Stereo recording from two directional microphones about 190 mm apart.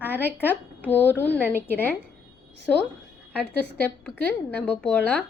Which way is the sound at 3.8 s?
10° left (ahead or behind).